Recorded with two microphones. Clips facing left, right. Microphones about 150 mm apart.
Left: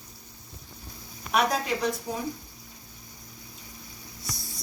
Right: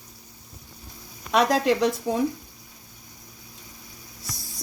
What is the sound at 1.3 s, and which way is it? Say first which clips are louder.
Speech: right 5 dB; 90° right.